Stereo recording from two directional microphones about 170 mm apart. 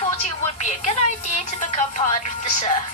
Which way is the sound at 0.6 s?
45° left (ahead or behind).